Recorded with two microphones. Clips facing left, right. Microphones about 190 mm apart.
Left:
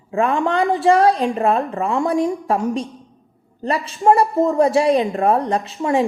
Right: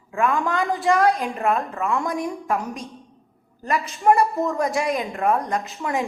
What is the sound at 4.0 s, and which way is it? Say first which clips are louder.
A woman's voice: left 4 dB; 30° left (ahead or behind).